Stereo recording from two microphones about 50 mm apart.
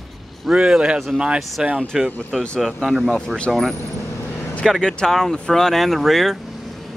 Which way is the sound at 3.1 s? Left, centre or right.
Centre.